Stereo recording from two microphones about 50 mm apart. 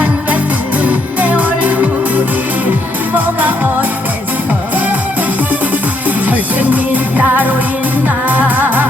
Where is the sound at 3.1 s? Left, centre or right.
Right.